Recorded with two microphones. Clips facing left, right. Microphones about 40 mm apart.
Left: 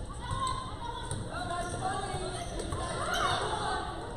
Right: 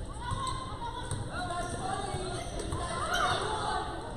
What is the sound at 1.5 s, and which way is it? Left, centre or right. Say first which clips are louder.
Basketball bounce: left 2 dB; centre.